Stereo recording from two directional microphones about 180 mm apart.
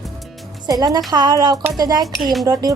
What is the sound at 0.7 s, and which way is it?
A woman's voice, 20° right (ahead or behind).